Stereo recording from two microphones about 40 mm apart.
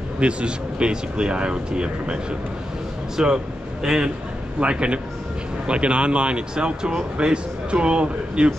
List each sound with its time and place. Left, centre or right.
0.2 s speech: right
3.2 s a man's voice: right
4.6 s speech: right